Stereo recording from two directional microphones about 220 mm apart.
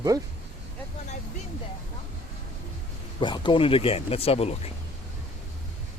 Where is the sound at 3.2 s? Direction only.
20° left (ahead or behind).